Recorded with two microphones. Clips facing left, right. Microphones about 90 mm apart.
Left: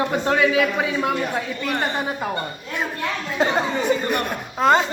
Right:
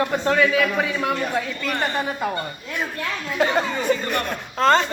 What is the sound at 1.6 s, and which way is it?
Speech, 20° left (ahead or behind).